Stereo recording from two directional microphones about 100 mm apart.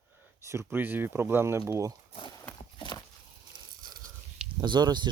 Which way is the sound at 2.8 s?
45° left (ahead or behind).